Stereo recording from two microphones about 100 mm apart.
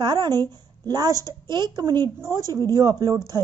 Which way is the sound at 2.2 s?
30° right (ahead or behind).